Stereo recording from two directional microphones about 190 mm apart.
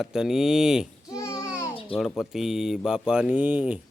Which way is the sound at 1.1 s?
15° left (ahead or behind).